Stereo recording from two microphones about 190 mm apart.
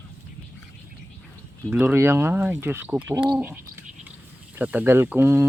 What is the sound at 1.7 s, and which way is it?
Speech, 10° right (ahead or behind).